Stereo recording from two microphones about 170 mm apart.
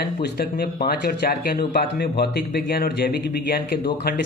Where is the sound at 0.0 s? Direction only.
70° left (ahead or behind).